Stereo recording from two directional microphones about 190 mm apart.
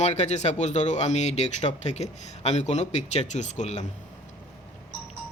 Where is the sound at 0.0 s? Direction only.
35° left (ahead or behind).